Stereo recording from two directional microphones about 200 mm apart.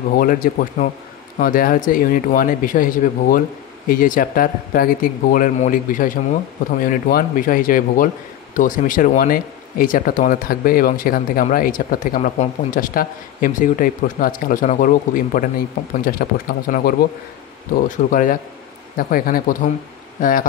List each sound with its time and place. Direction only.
0.1 s speech: 45° left (ahead or behind)